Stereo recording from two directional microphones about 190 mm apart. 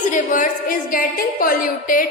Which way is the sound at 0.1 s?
45° left (ahead or behind).